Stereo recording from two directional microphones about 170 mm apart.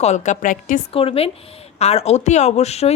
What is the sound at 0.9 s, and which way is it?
Speech, 35° left (ahead or behind).